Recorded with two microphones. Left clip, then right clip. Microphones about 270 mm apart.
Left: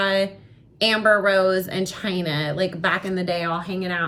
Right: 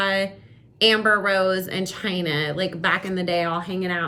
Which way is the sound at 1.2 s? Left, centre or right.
Centre.